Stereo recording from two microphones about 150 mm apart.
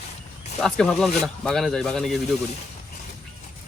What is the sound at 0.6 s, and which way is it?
Speech, 5° left (ahead or behind).